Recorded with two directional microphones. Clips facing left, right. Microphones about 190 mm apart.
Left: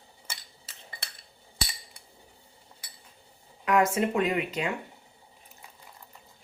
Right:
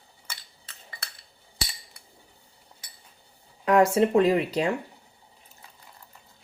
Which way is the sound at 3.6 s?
30° right (ahead or behind).